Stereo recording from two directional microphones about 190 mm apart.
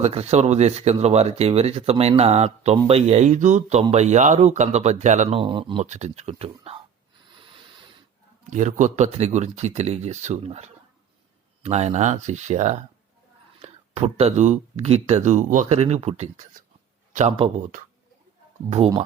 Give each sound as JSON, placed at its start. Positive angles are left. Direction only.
{"t": 0.0, "sound": "speech", "side_deg": -35}
{"t": 5.4, "sound": "speech", "side_deg": -25}
{"t": 5.8, "sound": "speech", "side_deg": -35}
{"t": 7.3, "sound": "a sound", "side_deg": -25}
{"t": 8.4, "sound": "speech", "side_deg": -40}
{"t": 17.1, "sound": "a sound", "side_deg": -40}